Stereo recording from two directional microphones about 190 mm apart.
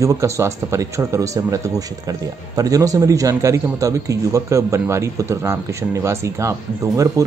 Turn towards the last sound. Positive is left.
turn(degrees=-15)  # may be behind; listen again after turning